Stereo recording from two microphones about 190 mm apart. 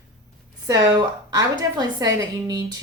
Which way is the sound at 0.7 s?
20° right (ahead or behind).